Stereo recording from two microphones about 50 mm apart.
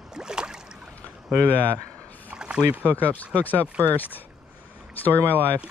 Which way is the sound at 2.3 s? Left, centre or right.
Centre.